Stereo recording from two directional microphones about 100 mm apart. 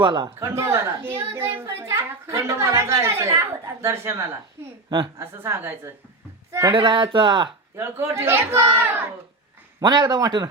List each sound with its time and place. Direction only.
0.0 s speech: 50° right (ahead or behind)
0.3 s a child's voice: 30° right (ahead or behind)
5.1 s a child's voice: 25° right (ahead or behind)
6.7 s speech: 55° right (ahead or behind)
7.8 s a child's voice: 25° right (ahead or behind)
9.8 s speech: 45° right (ahead or behind)